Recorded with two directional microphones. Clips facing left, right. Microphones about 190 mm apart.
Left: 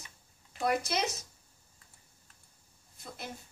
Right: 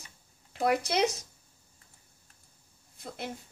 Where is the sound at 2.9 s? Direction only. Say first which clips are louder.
Right 5 dB; 65° right (ahead or behind).